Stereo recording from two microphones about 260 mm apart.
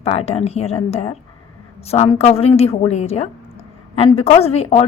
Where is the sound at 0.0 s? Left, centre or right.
Left.